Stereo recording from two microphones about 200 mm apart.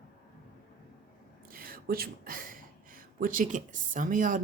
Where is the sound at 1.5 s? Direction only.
45° right (ahead or behind).